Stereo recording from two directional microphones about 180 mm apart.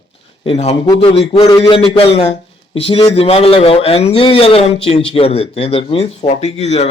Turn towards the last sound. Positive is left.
turn(degrees=35)  # may be behind; listen again after turning